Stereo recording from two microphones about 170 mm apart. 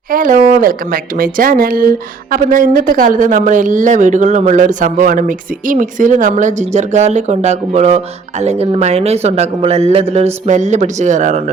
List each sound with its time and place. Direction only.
0.1 s speech: 55° right (ahead or behind)